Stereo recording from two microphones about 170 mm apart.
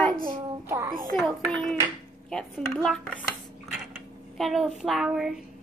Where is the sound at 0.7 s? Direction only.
15° right (ahead or behind).